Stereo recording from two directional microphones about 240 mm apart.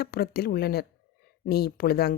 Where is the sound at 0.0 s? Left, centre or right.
Left.